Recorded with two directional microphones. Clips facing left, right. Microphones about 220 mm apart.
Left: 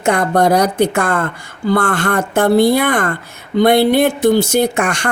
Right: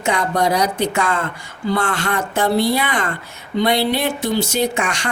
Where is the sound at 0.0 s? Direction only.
50° left (ahead or behind).